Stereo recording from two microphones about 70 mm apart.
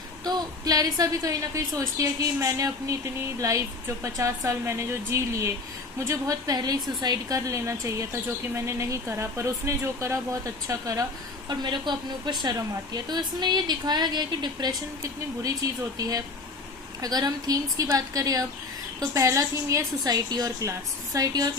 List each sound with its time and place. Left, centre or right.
0.3 s a woman's voice: right
6.6 s a woman's voice: right
7.3 s speech: right
10.7 s a woman's voice: right
11.4 s a woman's voice: right
16.0 s a woman's voice: right
18.9 s a woman's voice: right